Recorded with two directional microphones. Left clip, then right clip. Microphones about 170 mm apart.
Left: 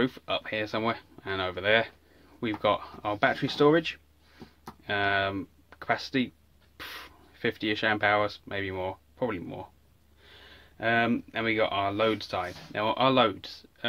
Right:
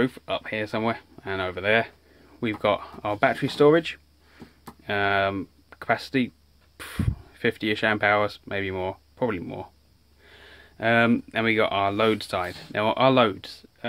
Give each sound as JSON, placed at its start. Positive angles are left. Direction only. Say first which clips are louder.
{"t": 0.0, "sound": "speech", "louder": "right 3 dB", "side_deg": -20}